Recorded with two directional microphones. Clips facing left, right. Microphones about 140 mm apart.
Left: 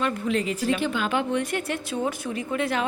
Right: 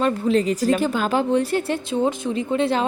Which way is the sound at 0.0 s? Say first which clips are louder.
Right 6 dB; 35° right (ahead or behind).